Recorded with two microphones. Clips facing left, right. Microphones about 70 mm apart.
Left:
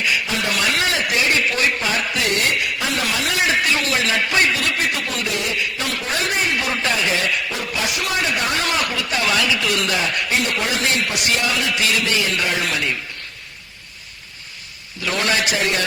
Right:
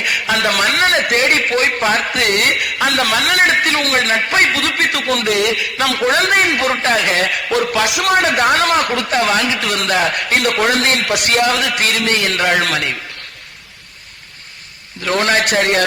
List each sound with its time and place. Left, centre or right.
0.0 s speech: right
8.1 s speech: right
15.0 s a man's voice: right